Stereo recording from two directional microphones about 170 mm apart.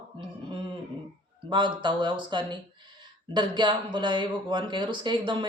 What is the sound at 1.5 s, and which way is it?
Speech, 25° right (ahead or behind).